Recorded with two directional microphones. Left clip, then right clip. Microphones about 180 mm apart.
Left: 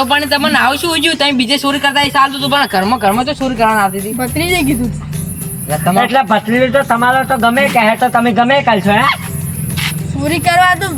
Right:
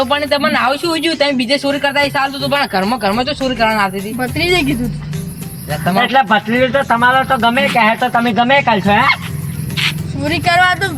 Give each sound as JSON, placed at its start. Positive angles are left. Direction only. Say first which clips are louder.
{"t": 0.0, "sound": "speech", "louder": "left 2 dB", "side_deg": -15}
{"t": 2.5, "sound": "speech", "louder": "left 3 dB", "side_deg": -20}
{"t": 4.2, "sound": "speech", "louder": "even", "side_deg": 0}
{"t": 5.9, "sound": "speech", "louder": "even", "side_deg": 10}
{"t": 10.2, "sound": "speech", "louder": "left 2 dB", "side_deg": 0}